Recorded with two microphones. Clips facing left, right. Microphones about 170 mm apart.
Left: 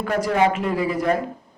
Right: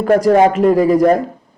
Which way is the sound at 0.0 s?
40° right (ahead or behind).